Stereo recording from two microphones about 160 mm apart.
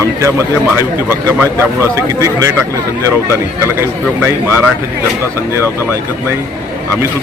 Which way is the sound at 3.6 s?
15° right (ahead or behind).